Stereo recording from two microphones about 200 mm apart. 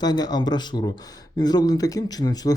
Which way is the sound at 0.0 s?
20° left (ahead or behind).